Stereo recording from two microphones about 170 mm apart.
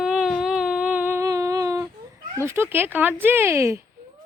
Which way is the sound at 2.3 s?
15° right (ahead or behind).